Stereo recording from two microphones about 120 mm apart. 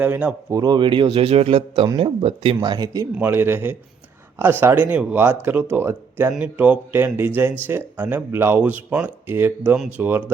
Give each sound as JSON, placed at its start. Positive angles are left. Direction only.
{"t": 0.0, "sound": "speech", "side_deg": -10}
{"t": 0.5, "sound": "a man's voice", "side_deg": -35}
{"t": 3.2, "sound": "a man's voice", "side_deg": -20}